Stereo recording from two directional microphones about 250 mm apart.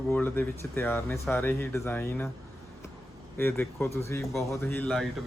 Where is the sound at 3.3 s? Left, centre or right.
Centre.